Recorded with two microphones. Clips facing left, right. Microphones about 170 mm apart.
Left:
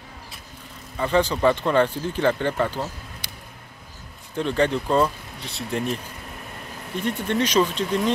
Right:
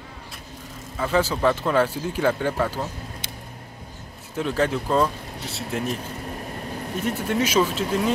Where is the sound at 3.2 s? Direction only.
25° right (ahead or behind).